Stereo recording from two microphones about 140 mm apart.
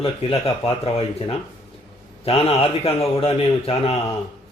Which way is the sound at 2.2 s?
45° left (ahead or behind).